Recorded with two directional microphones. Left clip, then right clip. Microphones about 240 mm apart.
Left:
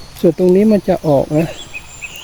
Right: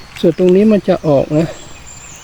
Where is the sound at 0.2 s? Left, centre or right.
Centre.